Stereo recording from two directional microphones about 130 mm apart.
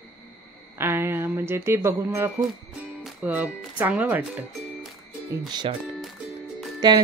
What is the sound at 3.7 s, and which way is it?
Speech, 15° right (ahead or behind).